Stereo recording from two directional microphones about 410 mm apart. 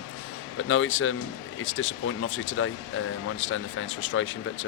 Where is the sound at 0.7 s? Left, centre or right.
Left.